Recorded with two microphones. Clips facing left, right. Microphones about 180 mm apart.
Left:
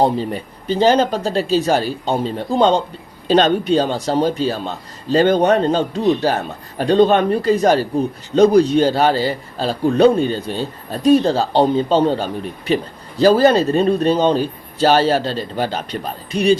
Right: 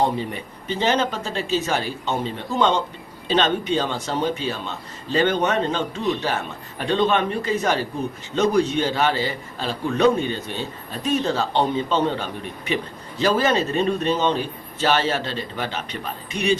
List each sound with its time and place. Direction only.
0.0 s a man's voice: 35° left (ahead or behind)